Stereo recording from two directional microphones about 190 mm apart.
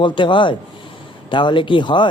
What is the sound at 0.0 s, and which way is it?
Speech, 25° left (ahead or behind).